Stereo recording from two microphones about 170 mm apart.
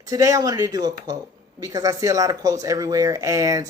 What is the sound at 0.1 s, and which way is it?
A woman's voice, 20° right (ahead or behind).